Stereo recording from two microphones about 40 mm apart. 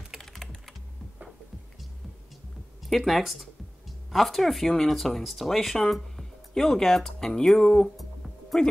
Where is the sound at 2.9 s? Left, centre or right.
Centre.